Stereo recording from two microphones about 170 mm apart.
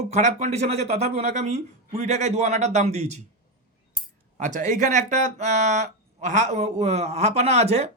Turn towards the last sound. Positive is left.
turn(degrees=-40)  # may be behind; listen again after turning